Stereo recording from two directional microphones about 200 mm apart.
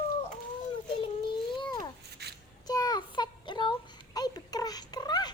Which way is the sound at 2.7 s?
20° left (ahead or behind).